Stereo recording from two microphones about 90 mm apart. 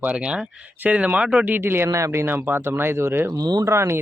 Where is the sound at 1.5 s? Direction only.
25° right (ahead or behind).